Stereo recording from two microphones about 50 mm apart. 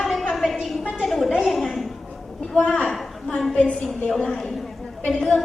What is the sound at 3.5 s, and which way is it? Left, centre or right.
Speech, left.